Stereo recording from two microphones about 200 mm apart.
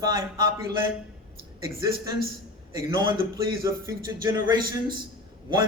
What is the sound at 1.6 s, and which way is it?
A man's voice, 15° right (ahead or behind).